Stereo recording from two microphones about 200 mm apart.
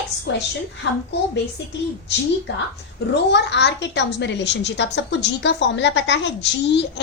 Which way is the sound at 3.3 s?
60° left (ahead or behind).